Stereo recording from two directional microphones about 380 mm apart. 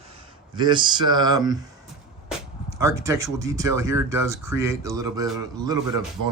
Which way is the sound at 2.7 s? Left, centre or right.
Centre.